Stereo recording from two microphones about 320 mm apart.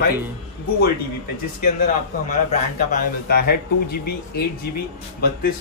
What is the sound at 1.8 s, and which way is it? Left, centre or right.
Speech, left.